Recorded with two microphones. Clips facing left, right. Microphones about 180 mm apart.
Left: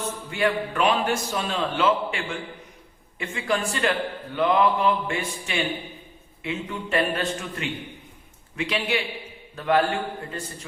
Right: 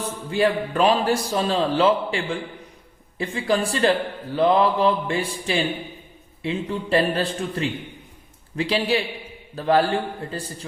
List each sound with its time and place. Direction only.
0.0 s a man's voice: 30° right (ahead or behind)